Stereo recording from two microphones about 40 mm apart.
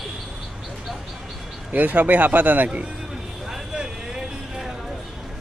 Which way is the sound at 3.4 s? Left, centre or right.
Centre.